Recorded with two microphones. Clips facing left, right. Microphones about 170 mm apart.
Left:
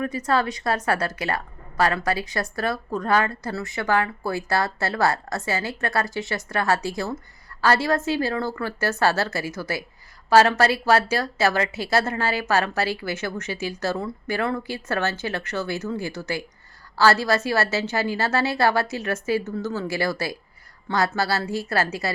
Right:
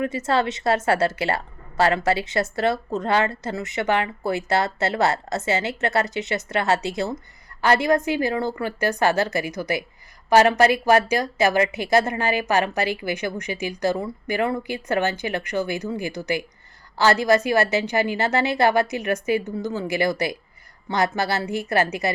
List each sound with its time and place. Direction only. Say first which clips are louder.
0.0 s a woman's voice: right 1 dB; 25° right (ahead or behind)